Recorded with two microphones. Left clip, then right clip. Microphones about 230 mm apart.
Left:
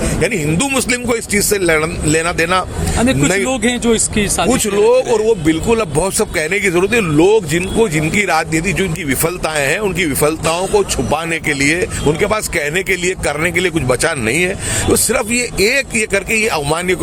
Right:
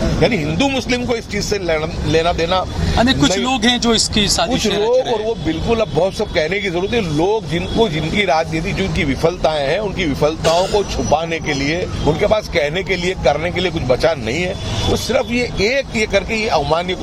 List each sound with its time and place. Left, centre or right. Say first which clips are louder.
0.2 s speech: right 1 dB; left
2.9 s speech: even; centre
4.6 s speech: left 5 dB; left